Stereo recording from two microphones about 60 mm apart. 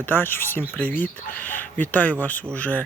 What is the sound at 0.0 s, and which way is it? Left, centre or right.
Speech, left.